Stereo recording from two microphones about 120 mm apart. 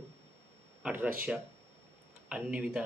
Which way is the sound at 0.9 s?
15° right (ahead or behind).